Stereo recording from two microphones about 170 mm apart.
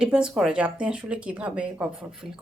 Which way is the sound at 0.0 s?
5° right (ahead or behind).